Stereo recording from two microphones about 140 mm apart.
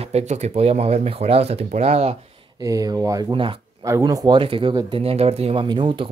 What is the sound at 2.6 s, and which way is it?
Speech, 25° right (ahead or behind).